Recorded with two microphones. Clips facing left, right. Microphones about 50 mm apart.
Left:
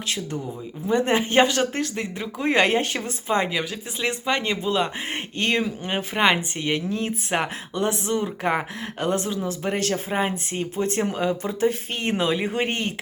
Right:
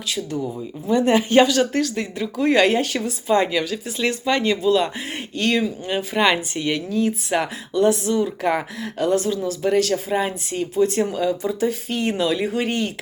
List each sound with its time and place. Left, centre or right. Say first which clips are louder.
0.9 s speech: right 3 dB; left